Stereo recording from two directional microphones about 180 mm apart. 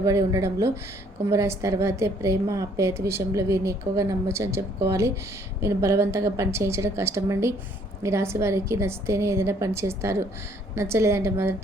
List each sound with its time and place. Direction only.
0.0 s a woman's voice: 20° right (ahead or behind)